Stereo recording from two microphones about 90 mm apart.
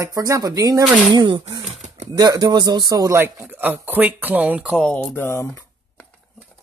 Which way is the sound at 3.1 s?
25° right (ahead or behind).